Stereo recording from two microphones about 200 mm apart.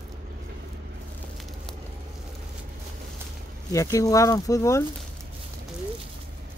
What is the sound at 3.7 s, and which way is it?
Speech, 15° left (ahead or behind).